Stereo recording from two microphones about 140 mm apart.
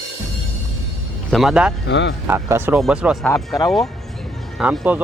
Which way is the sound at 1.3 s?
5° right (ahead or behind).